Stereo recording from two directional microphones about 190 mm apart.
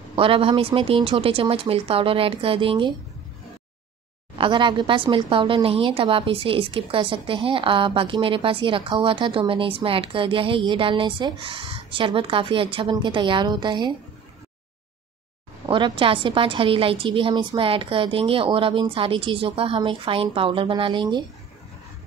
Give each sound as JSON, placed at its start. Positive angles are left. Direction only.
{"t": 0.1, "sound": "a woman's voice", "side_deg": -30}
{"t": 4.4, "sound": "a woman's voice", "side_deg": -25}
{"t": 15.7, "sound": "a woman's voice", "side_deg": -25}